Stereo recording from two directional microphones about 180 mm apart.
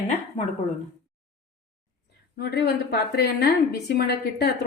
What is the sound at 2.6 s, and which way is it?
Speech, 65° left (ahead or behind).